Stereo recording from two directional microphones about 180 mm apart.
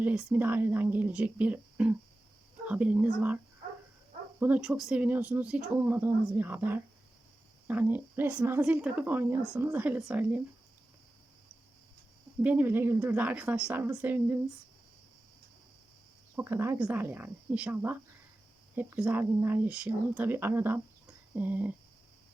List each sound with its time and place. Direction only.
0.0 s speech: 5° right (ahead or behind)
4.4 s speech: 10° right (ahead or behind)
12.4 s speech: 10° right (ahead or behind)
16.3 s speech: 15° right (ahead or behind)